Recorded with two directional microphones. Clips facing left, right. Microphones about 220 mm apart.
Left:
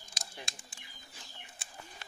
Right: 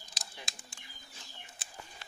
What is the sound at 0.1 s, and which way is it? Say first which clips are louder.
Bird: left 3 dB; centre (ahead or behind).